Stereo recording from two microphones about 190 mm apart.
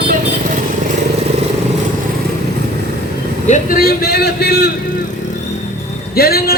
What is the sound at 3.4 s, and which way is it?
A man's voice, 45° left (ahead or behind).